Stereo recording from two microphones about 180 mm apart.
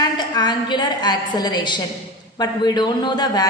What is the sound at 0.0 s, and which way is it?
A woman's voice, 25° left (ahead or behind).